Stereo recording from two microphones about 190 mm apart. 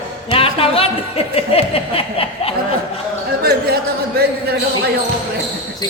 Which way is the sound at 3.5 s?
55° right (ahead or behind).